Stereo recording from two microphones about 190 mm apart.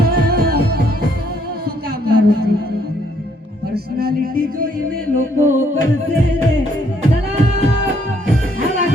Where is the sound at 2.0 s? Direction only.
55° right (ahead or behind).